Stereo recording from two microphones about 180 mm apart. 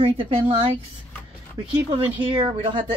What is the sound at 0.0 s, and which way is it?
Speech, 30° right (ahead or behind).